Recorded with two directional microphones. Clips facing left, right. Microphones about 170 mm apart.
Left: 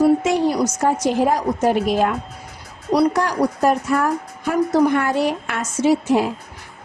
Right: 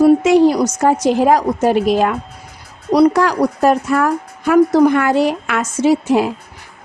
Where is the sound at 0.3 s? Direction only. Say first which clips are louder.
Right 7 dB; 90° right.